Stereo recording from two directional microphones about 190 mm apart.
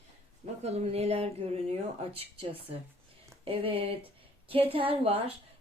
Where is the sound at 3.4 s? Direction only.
30° right (ahead or behind).